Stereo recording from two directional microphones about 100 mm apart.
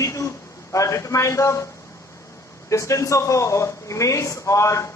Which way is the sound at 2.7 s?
30° left (ahead or behind).